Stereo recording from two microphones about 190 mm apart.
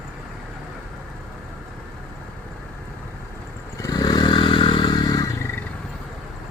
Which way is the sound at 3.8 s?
20° left (ahead or behind).